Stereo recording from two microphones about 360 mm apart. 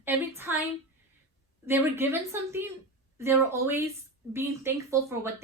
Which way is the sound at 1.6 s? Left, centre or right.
Centre.